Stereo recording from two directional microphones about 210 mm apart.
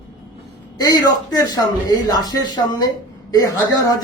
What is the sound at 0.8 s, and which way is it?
Speech, 15° left (ahead or behind).